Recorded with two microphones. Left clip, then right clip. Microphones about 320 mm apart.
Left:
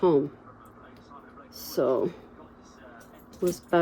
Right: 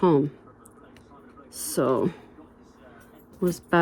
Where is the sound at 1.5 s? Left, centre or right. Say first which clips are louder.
Right 1 dB; right.